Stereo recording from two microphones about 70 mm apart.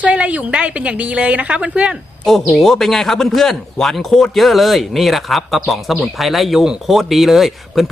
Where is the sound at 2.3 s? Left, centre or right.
Centre.